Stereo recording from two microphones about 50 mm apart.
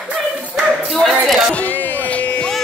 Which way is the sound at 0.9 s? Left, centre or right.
Centre.